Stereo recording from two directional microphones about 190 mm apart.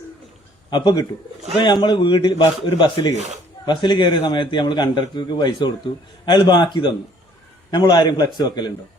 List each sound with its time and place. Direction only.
0.7 s a man's voice: 25° left (ahead or behind)